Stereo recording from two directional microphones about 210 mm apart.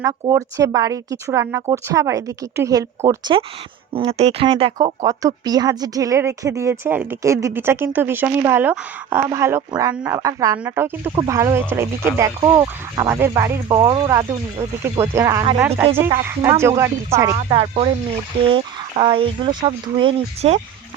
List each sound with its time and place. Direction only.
0.0 s speech: 15° right (ahead or behind)
10.2 s speech: 20° right (ahead or behind)
17.3 s speech: 25° right (ahead or behind)